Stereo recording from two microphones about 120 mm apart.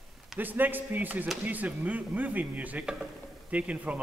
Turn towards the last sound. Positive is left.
turn(degrees=-10)  # may be behind; listen again after turning